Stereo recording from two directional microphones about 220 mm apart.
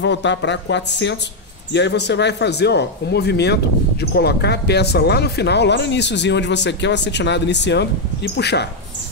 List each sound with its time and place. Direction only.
0.0 s speech: 55° left (ahead or behind)